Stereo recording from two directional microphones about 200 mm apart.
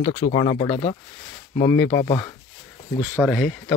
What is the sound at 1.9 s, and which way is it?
Speech, 20° left (ahead or behind).